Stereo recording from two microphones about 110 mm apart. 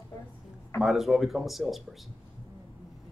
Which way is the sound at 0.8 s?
Centre (ahead or behind).